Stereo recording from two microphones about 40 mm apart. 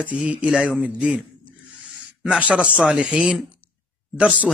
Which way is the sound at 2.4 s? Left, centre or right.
Right.